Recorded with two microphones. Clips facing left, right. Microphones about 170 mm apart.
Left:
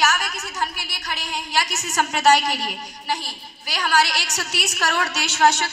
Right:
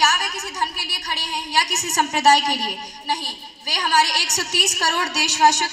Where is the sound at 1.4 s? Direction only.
40° right (ahead or behind).